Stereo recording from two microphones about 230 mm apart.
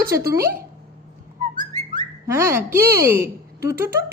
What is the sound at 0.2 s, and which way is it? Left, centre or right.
Speech, centre.